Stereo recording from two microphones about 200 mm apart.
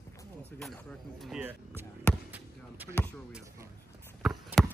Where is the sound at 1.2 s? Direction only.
5° right (ahead or behind).